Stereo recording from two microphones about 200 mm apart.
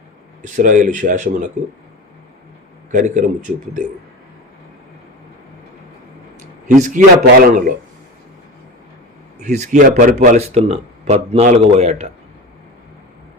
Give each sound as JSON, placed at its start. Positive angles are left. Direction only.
{"t": 0.4, "sound": "speech", "side_deg": -40}
{"t": 2.9, "sound": "speech", "side_deg": -40}
{"t": 6.7, "sound": "speech", "side_deg": -40}
{"t": 9.4, "sound": "speech", "side_deg": -35}